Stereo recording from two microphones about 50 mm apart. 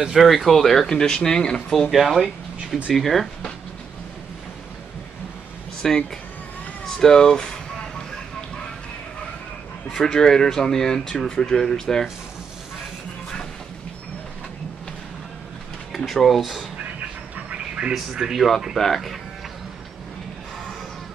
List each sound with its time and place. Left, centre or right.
0.0 s speech: centre
1.9 s speech: centre
5.8 s speech: centre
9.8 s speech: centre
16.1 s speech: centre
17.5 s a sound: centre
18.3 s speech: centre